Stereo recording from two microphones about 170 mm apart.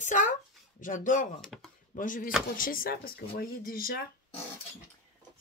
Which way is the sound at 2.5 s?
55° left (ahead or behind).